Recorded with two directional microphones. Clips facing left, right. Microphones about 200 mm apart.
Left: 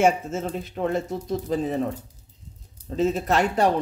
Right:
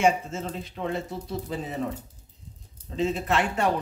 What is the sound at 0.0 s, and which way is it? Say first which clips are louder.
Speech: left 3 dB; 45° left (ahead or behind).